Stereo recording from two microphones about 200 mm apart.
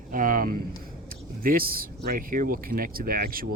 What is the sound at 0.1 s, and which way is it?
Speech, 45° right (ahead or behind).